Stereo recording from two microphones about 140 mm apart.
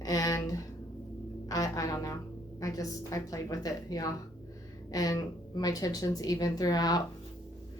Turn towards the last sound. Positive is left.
turn(degrees=30)  # may be behind; listen again after turning